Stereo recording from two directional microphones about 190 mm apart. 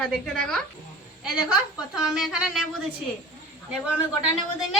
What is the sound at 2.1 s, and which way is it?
Speech, 5° right (ahead or behind).